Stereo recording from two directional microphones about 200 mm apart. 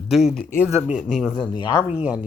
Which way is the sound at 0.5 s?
10° left (ahead or behind).